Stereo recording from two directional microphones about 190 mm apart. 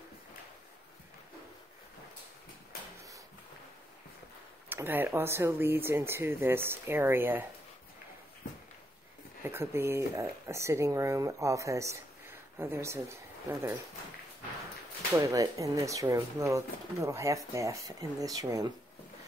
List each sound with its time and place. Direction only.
4.6 s speech: 10° right (ahead or behind)
9.4 s speech: 10° right (ahead or behind)
15.1 s speech: 15° right (ahead or behind)